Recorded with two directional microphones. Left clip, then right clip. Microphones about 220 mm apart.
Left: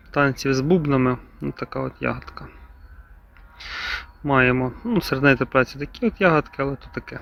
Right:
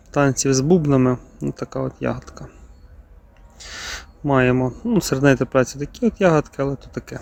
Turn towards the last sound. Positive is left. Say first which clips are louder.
# right 2 dB
turn(degrees=-25)  # may be behind; listen again after turning